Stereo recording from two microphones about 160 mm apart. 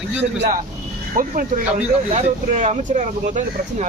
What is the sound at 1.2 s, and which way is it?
Speech, 60° right (ahead or behind).